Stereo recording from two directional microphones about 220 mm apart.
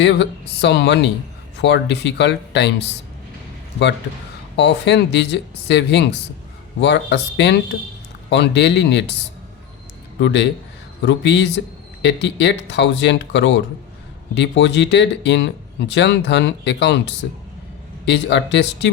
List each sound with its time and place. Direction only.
0.0 s speech: 55° left (ahead or behind)
4.5 s speech: 50° left (ahead or behind)
10.2 s speech: 55° left (ahead or behind)